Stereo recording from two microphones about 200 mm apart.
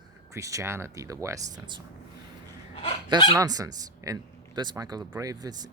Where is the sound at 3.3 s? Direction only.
15° right (ahead or behind).